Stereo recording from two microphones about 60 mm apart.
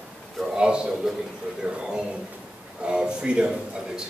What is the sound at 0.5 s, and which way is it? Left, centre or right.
A man's voice, centre.